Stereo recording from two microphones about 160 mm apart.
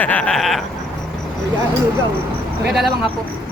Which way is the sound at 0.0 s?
10° left (ahead or behind).